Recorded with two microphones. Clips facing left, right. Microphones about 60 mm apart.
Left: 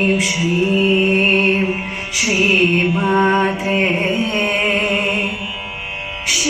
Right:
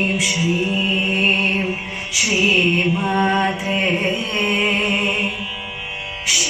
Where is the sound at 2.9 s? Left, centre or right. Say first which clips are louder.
Left 3 dB; centre.